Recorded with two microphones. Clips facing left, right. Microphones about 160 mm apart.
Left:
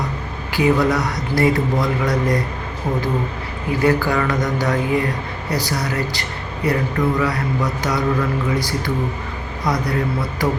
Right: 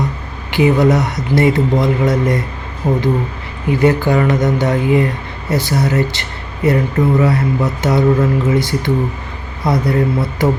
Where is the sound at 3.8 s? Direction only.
25° right (ahead or behind).